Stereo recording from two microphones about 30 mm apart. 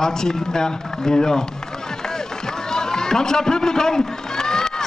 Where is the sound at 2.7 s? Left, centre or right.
Left.